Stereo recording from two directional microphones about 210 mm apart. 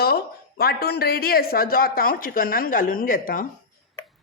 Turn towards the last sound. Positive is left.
turn(degrees=40)  # may be behind; listen again after turning